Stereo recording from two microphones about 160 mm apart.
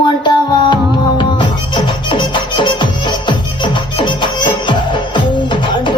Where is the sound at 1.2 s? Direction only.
30° left (ahead or behind).